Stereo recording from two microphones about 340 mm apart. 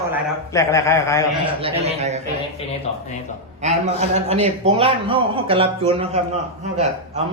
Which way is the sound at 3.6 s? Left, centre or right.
Centre.